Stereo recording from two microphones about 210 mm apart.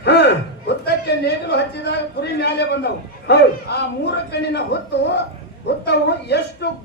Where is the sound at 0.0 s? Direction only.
50° left (ahead or behind).